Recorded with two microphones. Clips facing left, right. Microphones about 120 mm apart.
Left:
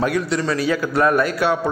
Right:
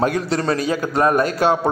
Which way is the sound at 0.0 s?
40° right (ahead or behind).